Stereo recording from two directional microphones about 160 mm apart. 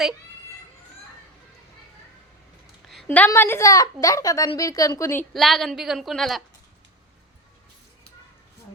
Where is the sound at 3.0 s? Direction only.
10° left (ahead or behind).